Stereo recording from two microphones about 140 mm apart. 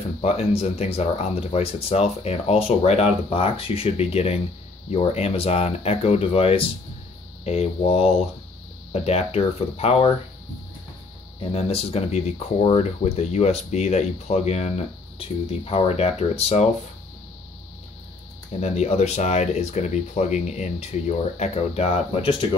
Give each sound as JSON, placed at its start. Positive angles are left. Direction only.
{"t": 0.2, "sound": "speech", "side_deg": 45}
{"t": 11.3, "sound": "speech", "side_deg": 45}
{"t": 18.5, "sound": "speech", "side_deg": 50}